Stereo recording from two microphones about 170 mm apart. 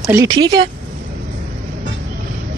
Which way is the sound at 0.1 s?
20° right (ahead or behind).